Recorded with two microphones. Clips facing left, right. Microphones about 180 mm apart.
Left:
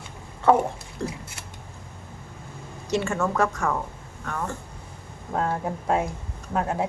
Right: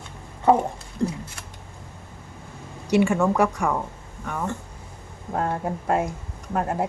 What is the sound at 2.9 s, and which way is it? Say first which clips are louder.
Speech: right 5 dB; 15° right (ahead or behind).